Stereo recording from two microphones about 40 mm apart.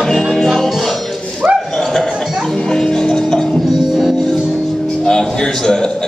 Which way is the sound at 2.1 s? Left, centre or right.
Centre.